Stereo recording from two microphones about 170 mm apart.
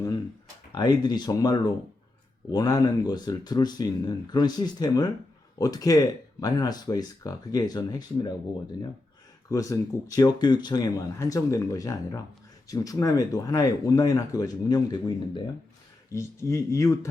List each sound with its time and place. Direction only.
0.7 s speech: 25° left (ahead or behind)
9.5 s speech: 20° left (ahead or behind)